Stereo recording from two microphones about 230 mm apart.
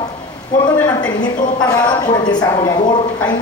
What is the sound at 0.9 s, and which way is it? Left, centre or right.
A woman's voice, centre.